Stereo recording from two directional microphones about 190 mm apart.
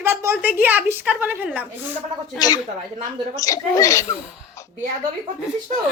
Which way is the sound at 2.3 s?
20° left (ahead or behind).